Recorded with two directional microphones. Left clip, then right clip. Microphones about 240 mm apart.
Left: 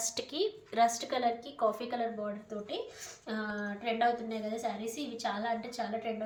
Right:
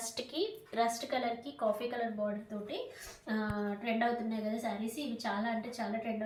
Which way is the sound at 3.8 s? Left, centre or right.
Left.